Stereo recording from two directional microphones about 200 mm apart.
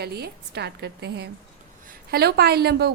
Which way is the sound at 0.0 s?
55° right (ahead or behind).